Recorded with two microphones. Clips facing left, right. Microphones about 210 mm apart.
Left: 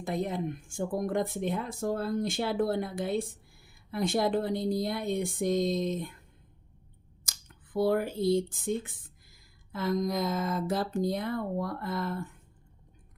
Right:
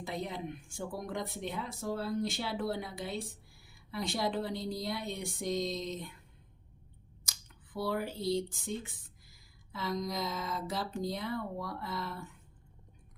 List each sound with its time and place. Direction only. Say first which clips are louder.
0.0 s speech: left 7 dB; 50° left (ahead or behind)
7.3 s speech: left 2 dB; 50° left (ahead or behind)